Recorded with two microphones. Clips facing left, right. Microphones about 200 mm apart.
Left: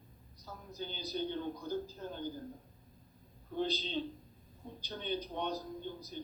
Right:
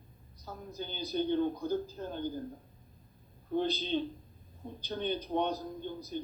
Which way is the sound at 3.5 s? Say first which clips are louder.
Right 5 dB; 55° right (ahead or behind).